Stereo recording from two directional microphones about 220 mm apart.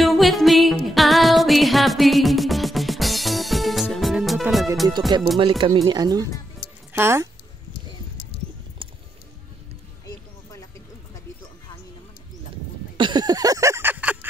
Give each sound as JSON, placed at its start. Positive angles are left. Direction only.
{"t": 0.0, "sound": "music", "side_deg": 0}
{"t": 5.1, "sound": "speech", "side_deg": -20}
{"t": 12.9, "sound": "a sound", "side_deg": -20}